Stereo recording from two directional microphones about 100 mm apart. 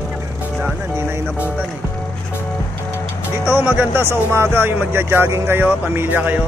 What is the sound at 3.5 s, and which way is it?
Speech, 15° right (ahead or behind).